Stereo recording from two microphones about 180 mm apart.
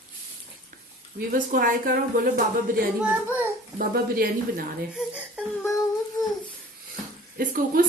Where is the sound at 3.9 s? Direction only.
55° right (ahead or behind).